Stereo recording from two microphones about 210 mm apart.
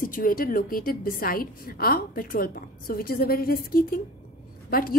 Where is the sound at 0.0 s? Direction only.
40° left (ahead or behind).